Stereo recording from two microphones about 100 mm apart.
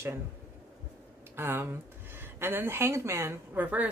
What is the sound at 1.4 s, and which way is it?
A woman's voice, 25° right (ahead or behind).